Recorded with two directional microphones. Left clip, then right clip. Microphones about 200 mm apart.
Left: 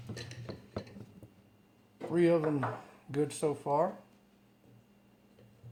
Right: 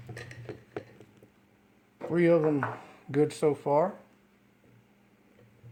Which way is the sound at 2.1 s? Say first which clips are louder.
Right 4 dB; 45° right (ahead or behind).